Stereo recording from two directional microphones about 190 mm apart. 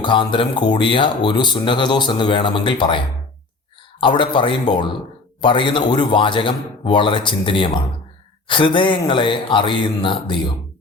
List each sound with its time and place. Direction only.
0.0 s speech: 25° left (ahead or behind)
4.0 s speech: 25° left (ahead or behind)